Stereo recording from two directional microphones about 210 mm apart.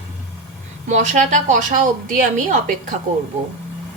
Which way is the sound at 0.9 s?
35° right (ahead or behind).